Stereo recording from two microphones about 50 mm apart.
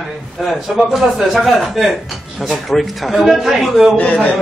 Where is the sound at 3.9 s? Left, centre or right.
Left.